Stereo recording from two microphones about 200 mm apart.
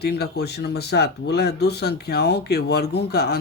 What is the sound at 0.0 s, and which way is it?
Speech, 55° left (ahead or behind).